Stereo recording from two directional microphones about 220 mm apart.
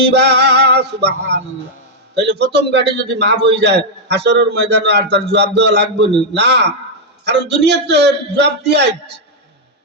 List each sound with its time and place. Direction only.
0.0 s music: 50° right (ahead or behind)
2.1 s a man's voice: 50° right (ahead or behind)